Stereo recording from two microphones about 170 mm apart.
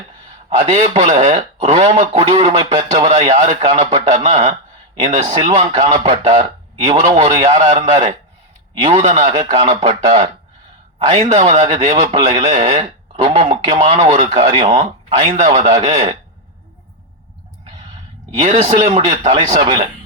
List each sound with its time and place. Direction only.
0.5 s a man's voice: 35° right (ahead or behind)
7.8 s a man's voice: 50° right (ahead or behind)
8.7 s speech: 35° right (ahead or behind)
11.8 s a man's voice: 45° right (ahead or behind)
12.1 s a man's voice: 30° right (ahead or behind)
18.5 s a man's voice: 35° right (ahead or behind)